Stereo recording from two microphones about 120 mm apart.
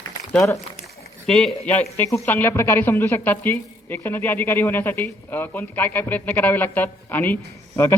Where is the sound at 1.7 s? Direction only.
15° left (ahead or behind).